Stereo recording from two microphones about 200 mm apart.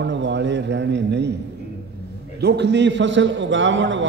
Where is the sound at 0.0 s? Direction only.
60° right (ahead or behind).